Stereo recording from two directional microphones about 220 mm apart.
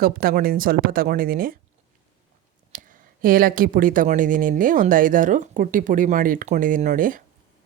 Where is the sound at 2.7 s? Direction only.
40° right (ahead or behind).